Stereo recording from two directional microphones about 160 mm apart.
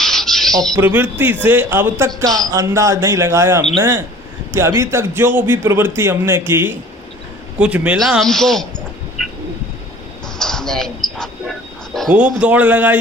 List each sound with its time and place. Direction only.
0.0 s squawk: centre (ahead or behind)
0.8 s a man's voice: 10° right (ahead or behind)
10.3 s music: 5° left (ahead or behind)
11.9 s a man's voice: 5° right (ahead or behind)